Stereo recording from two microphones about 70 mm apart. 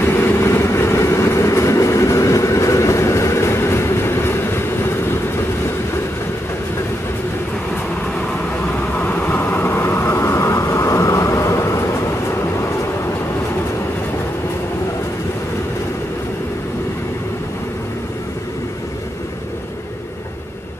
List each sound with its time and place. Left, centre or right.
0.0 s train: left
8.7 s vehicle: left